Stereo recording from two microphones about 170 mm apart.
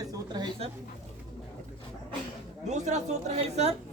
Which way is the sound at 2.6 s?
45° right (ahead or behind).